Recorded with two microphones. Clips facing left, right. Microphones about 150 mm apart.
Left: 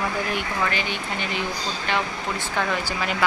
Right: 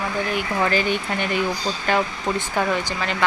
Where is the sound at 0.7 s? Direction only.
50° right (ahead or behind).